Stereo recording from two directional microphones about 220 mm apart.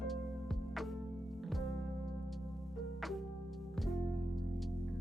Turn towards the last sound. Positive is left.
turn(degrees=0)  # may be behind; listen again after turning